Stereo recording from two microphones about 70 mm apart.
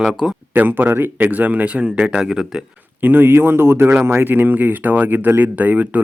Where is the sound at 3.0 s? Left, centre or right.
Right.